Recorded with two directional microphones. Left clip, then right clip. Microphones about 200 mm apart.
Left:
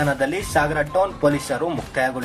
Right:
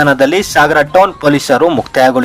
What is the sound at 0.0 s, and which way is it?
A man's voice, 50° right (ahead or behind).